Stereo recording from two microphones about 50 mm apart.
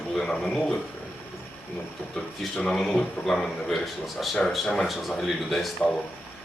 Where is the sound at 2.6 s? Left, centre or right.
Centre.